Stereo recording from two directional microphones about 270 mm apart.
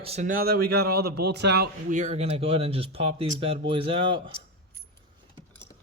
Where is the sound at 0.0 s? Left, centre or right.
Right.